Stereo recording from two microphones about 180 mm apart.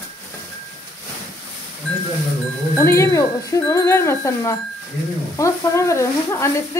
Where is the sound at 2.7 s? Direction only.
15° left (ahead or behind).